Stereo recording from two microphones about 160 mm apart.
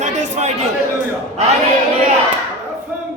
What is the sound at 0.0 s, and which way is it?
Chatter, 45° right (ahead or behind).